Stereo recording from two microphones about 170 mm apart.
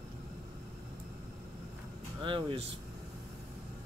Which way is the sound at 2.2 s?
30° right (ahead or behind).